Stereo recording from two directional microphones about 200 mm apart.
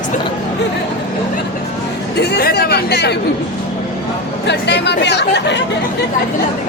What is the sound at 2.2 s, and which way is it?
Speech, 50° left (ahead or behind).